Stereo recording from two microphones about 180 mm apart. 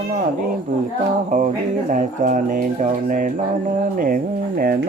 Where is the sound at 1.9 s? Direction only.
45° right (ahead or behind).